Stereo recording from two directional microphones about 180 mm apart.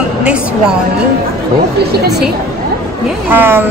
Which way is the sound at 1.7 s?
60° right (ahead or behind).